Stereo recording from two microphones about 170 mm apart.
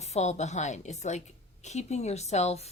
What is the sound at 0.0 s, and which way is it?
Speech, 40° left (ahead or behind).